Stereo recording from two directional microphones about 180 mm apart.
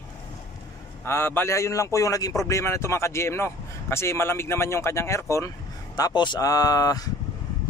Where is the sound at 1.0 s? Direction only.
15° left (ahead or behind).